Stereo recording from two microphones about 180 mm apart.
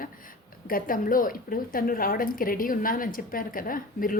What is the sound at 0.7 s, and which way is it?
A woman's voice, 50° left (ahead or behind).